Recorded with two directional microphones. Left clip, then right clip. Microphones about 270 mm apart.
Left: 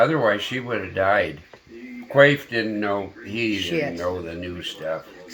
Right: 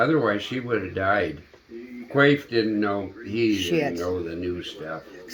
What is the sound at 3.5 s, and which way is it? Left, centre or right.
Speech, right.